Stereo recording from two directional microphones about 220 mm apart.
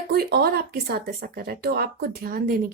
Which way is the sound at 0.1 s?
45° right (ahead or behind).